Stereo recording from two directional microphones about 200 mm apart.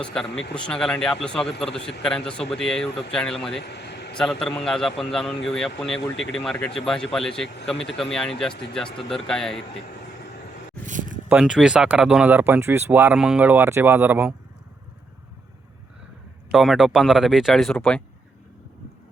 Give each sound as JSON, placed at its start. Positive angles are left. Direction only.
{"t": 0.0, "sound": "speech", "side_deg": 5}
{"t": 3.6, "sound": "vehicle", "side_deg": 55}
{"t": 4.1, "sound": "speech", "side_deg": 5}
{"t": 10.8, "sound": "a sound", "side_deg": -40}
{"t": 11.3, "sound": "speech", "side_deg": -5}
{"t": 16.5, "sound": "speech", "side_deg": 0}